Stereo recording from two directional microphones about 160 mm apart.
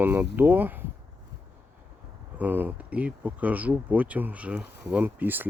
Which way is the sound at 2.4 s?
10° right (ahead or behind).